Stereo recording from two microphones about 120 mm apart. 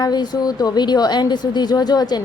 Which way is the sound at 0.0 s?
35° left (ahead or behind).